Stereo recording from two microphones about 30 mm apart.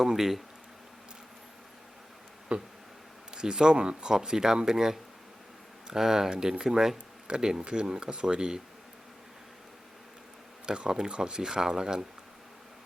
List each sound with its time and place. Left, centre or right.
0.0 s speech: centre
2.5 s speech: right
3.3 s speech: right
7.3 s speech: right
10.7 s speech: right